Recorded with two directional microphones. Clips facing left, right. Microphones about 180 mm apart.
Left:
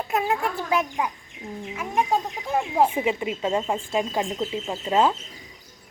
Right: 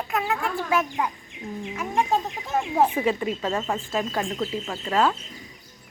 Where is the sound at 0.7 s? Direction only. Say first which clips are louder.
Even; 15° left (ahead or behind).